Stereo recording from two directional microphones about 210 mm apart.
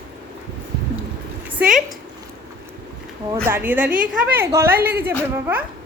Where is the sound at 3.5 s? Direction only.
10° right (ahead or behind).